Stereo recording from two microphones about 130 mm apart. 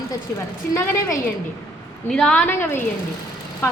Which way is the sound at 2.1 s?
5° left (ahead or behind).